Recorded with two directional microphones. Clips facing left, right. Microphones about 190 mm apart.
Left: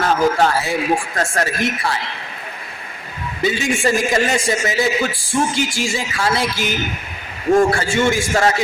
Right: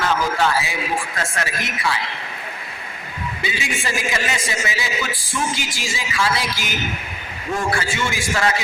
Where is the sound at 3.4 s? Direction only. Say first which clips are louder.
Left 10 dB; 45° left (ahead or behind).